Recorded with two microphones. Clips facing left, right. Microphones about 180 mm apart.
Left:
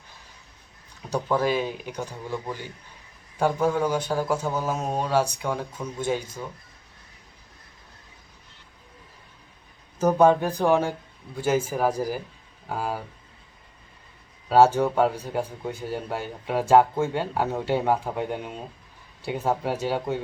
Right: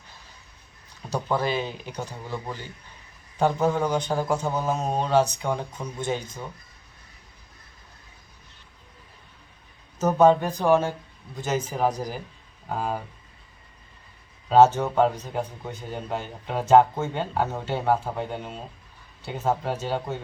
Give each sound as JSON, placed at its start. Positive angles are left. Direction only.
{"t": 1.4, "sound": "speech", "side_deg": 10}
{"t": 10.2, "sound": "speech", "side_deg": 10}
{"t": 14.5, "sound": "speech", "side_deg": 10}